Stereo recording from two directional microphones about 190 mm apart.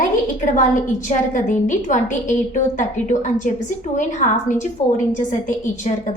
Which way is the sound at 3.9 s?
40° left (ahead or behind).